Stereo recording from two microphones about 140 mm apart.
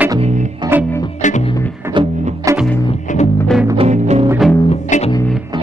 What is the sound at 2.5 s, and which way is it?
Music, 25° right (ahead or behind).